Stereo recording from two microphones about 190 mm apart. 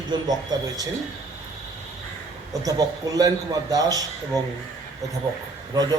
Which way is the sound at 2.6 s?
20° right (ahead or behind).